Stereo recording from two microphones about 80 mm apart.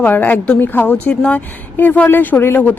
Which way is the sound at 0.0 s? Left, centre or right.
Left.